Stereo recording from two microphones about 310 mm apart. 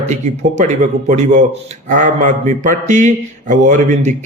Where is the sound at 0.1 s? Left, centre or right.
Right.